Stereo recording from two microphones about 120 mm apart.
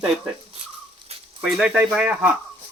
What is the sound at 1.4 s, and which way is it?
Speech, 5° right (ahead or behind).